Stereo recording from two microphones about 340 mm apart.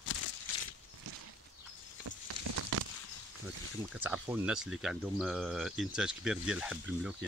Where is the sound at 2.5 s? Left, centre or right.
Right.